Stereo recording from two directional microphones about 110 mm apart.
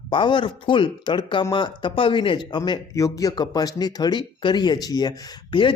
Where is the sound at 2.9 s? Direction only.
30° left (ahead or behind).